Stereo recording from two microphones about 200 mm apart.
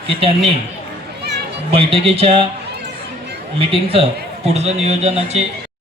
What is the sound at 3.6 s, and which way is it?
Speech, 30° right (ahead or behind).